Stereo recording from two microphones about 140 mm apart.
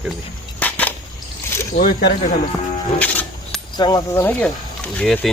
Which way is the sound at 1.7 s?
90° left.